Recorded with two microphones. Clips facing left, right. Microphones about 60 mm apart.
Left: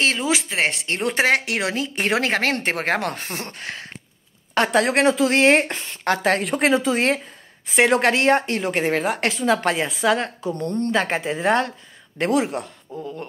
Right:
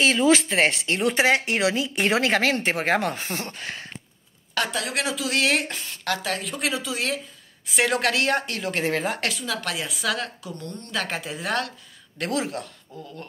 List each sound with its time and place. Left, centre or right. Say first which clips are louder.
0.2 s speech: right 3 dB; centre
0.8 s speech: left 1 dB; left
2.5 s speech: even; left
4.9 s a woman's voice: left 8 dB; left
7.6 s a woman's voice: left 6 dB; left
8.9 s speech: left 4 dB; centre
9.4 s a woman's voice: left 9 dB; left
12.3 s a woman's voice: left 6 dB; centre